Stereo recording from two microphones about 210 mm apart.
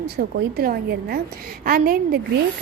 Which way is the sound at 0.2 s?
45° right (ahead or behind).